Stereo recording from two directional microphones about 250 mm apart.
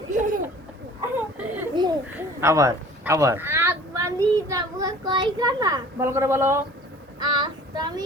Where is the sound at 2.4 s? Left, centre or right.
Centre.